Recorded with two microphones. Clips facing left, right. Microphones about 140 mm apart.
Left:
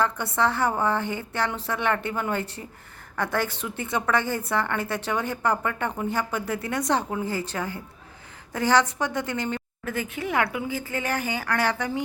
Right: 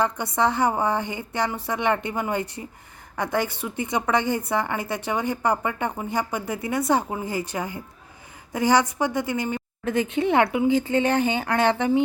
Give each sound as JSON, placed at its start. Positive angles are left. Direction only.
{"t": 0.0, "sound": "a woman's voice", "side_deg": -15}
{"t": 9.8, "sound": "speech", "side_deg": -20}